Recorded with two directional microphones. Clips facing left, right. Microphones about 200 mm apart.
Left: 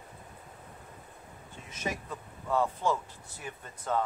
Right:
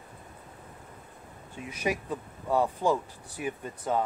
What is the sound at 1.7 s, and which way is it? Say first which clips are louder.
Speech: right 6 dB; 10° right (ahead or behind).